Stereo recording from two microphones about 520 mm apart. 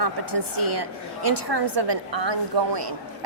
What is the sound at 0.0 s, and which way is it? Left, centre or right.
A woman's voice, right.